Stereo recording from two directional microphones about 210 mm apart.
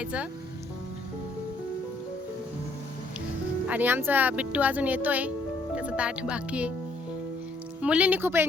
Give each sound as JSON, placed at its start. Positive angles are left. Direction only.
{"t": 0.0, "sound": "speech", "side_deg": -5}
{"t": 3.7, "sound": "speech", "side_deg": -10}
{"t": 7.8, "sound": "speech", "side_deg": -5}